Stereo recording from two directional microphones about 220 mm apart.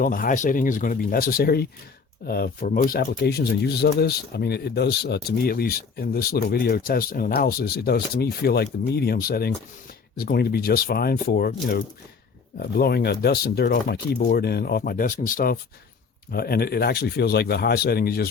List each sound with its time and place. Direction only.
0.0 s speech: 40° left (ahead or behind)